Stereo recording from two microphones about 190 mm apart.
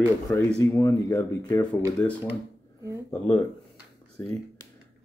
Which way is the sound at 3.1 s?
15° left (ahead or behind).